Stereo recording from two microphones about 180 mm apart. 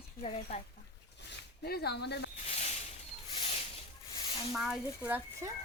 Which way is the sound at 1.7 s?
60° left (ahead or behind).